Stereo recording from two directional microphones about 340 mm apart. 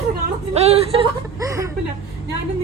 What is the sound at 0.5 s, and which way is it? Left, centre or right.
A woman's voice, centre.